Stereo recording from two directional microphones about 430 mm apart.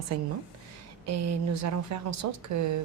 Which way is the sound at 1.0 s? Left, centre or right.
Right.